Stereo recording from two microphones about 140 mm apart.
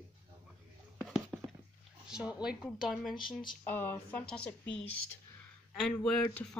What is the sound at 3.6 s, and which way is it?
Speech, 15° left (ahead or behind).